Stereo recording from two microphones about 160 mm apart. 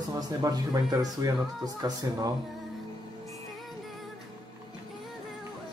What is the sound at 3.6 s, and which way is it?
Music, centre (ahead or behind).